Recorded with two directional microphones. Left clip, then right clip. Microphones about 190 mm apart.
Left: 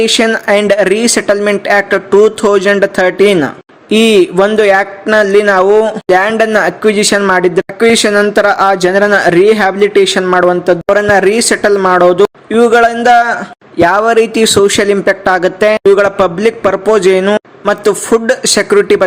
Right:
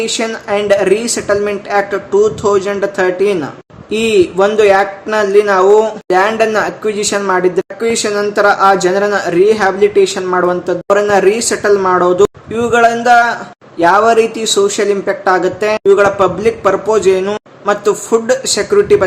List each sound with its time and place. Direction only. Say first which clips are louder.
0.0 s speech: left 7 dB; 45° left (ahead or behind)